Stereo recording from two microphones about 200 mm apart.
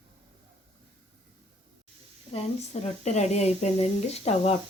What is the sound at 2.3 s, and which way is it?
Speech, 30° left (ahead or behind).